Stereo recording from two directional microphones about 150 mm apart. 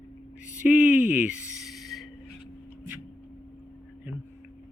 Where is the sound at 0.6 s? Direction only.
10° right (ahead or behind).